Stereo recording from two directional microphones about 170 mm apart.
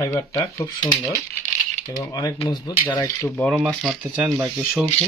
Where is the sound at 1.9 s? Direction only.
20° left (ahead or behind).